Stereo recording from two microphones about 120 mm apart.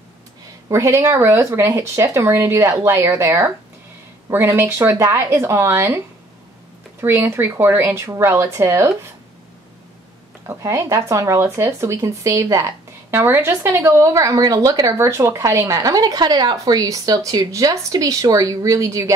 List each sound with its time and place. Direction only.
0.7 s speech: 25° right (ahead or behind)
10.4 s speech: 25° right (ahead or behind)